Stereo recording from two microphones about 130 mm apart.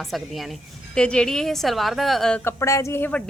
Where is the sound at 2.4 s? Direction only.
20° left (ahead or behind).